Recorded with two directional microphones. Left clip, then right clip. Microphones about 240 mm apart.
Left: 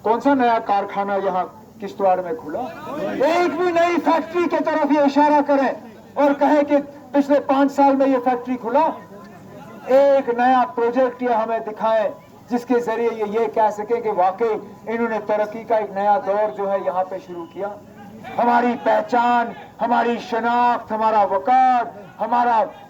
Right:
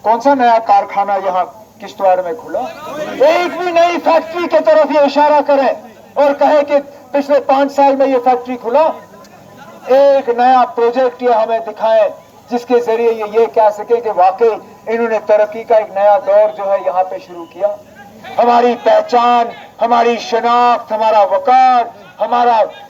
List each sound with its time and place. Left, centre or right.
0.0 s a man's voice: right